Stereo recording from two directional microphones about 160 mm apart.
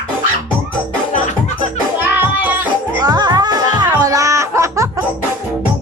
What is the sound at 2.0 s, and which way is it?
Music, 10° right (ahead or behind).